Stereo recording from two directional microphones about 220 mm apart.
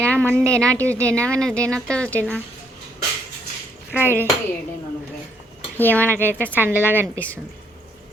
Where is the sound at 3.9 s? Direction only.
10° right (ahead or behind).